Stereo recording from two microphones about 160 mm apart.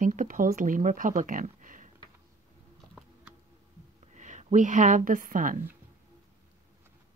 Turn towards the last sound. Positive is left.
turn(degrees=-60)  # may be behind; listen again after turning